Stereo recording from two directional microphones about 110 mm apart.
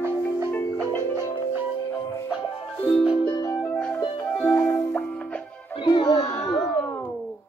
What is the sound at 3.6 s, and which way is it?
Music, 5° left (ahead or behind).